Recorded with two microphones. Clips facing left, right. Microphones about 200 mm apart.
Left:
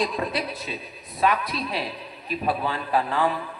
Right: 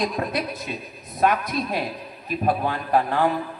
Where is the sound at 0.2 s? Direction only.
50° right (ahead or behind).